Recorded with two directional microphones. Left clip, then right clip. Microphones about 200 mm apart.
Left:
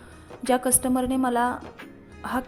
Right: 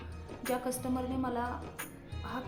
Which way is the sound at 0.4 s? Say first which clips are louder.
Left 11 dB; 40° left (ahead or behind).